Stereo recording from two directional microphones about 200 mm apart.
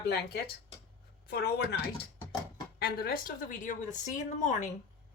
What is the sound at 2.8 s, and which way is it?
A woman's voice, 50° left (ahead or behind).